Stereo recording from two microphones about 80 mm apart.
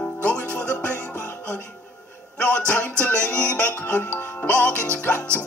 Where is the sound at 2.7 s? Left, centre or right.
Centre.